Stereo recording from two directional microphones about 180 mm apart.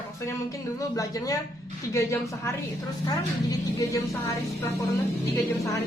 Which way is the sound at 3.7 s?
15° left (ahead or behind).